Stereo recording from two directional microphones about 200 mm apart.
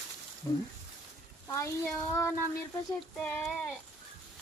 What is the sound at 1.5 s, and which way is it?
Speech, 15° left (ahead or behind).